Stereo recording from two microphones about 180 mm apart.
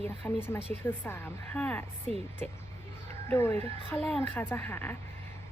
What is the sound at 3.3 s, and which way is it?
A woman's voice, 10° left (ahead or behind).